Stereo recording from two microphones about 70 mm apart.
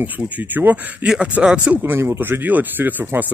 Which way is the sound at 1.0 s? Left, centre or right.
Centre.